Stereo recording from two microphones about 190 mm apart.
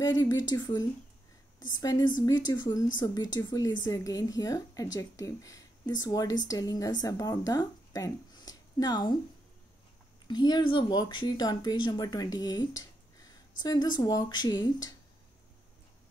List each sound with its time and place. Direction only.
0.0 s a woman's voice: 20° left (ahead or behind)
10.2 s a woman's voice: 20° left (ahead or behind)